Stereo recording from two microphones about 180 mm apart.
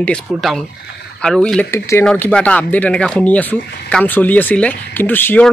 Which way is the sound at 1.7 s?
15° left (ahead or behind).